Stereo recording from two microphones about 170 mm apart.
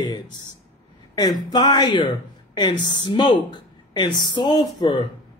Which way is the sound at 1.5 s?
25° left (ahead or behind).